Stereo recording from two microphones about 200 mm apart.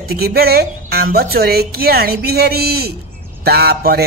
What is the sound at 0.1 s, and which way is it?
A man's voice, 50° right (ahead or behind).